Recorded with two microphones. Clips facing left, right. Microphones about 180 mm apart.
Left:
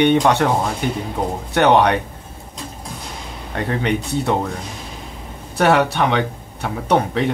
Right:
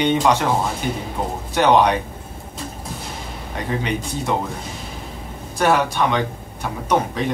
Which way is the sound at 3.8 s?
65° left (ahead or behind).